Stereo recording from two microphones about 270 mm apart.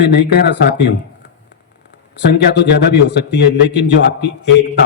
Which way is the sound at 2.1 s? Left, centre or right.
Left.